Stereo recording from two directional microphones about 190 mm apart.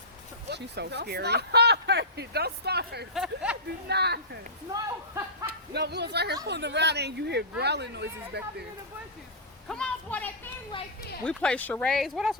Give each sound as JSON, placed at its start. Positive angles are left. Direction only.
{"t": 0.5, "sound": "speech", "side_deg": -65}
{"t": 3.2, "sound": "speech", "side_deg": -5}
{"t": 3.8, "sound": "speech", "side_deg": -60}
{"t": 4.7, "sound": "speech", "side_deg": -15}
{"t": 5.5, "sound": "speech", "side_deg": -60}
{"t": 9.6, "sound": "a sound", "side_deg": 5}
{"t": 11.2, "sound": "speech", "side_deg": 5}